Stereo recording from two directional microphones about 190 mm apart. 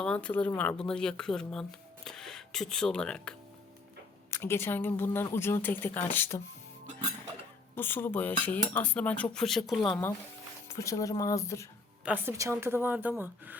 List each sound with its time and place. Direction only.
0.0 s speech: 5° left (ahead or behind)
7.8 s speech: 10° left (ahead or behind)
10.7 s speech: 15° left (ahead or behind)
12.0 s a woman's voice: 10° right (ahead or behind)